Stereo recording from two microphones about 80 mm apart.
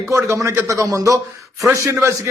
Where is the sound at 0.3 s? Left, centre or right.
Right.